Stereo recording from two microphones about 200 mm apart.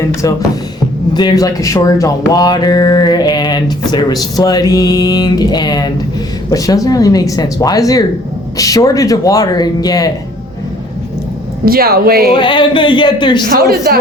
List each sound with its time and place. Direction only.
0.0 s speech: 15° left (ahead or behind)
11.6 s speech: 50° right (ahead or behind)
12.3 s speech: 25° left (ahead or behind)
13.5 s speech: 50° right (ahead or behind)